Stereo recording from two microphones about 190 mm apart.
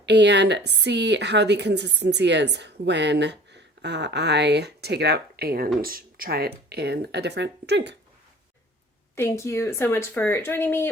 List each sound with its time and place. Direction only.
0.0 s a woman's voice: 65° right (ahead or behind)
9.1 s speech: 15° left (ahead or behind)